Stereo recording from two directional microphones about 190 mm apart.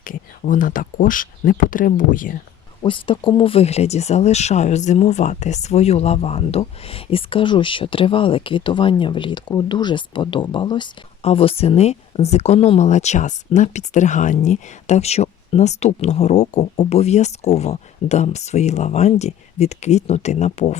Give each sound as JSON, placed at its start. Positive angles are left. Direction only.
{"t": 0.0, "sound": "speech", "side_deg": 45}
{"t": 2.8, "sound": "speech", "side_deg": 25}